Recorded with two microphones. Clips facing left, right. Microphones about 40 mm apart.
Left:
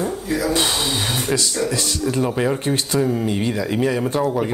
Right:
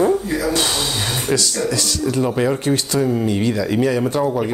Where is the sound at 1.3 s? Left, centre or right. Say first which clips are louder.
Right 3 dB; left.